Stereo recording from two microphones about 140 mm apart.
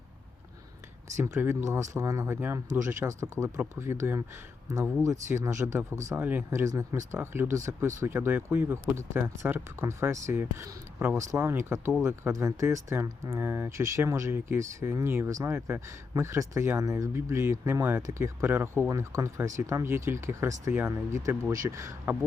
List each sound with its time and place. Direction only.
1.0 s speech: 20° right (ahead or behind)
5.3 s speech: 20° right (ahead or behind)